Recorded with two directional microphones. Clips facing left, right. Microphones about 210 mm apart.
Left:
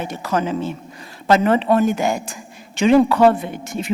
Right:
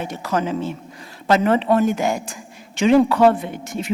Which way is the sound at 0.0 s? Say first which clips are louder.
Left 1 dB; 10° left (ahead or behind).